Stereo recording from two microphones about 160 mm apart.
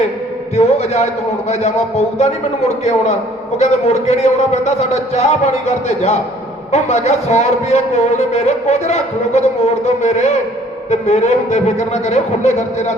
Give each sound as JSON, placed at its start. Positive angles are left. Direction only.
{"t": 0.5, "sound": "speech", "side_deg": 40}